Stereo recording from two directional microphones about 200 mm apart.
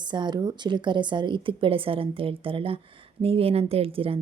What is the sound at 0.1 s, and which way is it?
A woman's voice, 20° right (ahead or behind).